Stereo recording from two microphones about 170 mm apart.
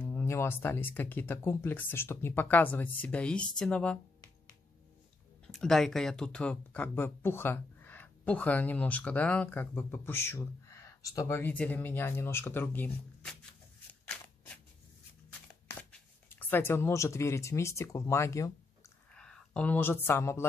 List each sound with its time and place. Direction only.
0.0 s speech: 15° left (ahead or behind)
5.5 s speech: centre (ahead or behind)
15.7 s speech: 10° left (ahead or behind)
19.1 s speech: 5° left (ahead or behind)